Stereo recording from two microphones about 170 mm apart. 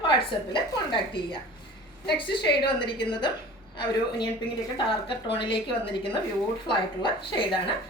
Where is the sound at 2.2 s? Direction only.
30° left (ahead or behind).